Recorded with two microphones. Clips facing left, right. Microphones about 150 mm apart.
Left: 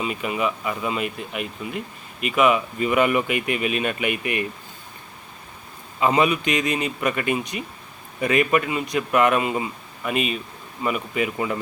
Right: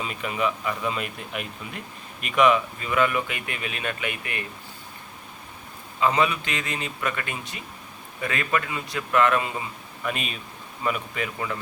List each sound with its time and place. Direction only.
0.0 s speech: 5° left (ahead or behind)
2.8 s speech: 20° left (ahead or behind)
6.0 s speech: 20° left (ahead or behind)
10.0 s speech: 5° left (ahead or behind)